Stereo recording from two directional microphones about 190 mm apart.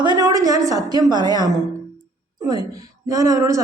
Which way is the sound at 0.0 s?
20° right (ahead or behind).